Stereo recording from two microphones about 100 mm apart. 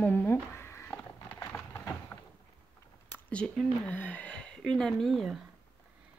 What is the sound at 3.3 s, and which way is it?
Speech, 10° left (ahead or behind).